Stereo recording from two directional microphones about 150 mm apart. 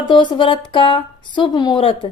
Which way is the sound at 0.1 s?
35° left (ahead or behind).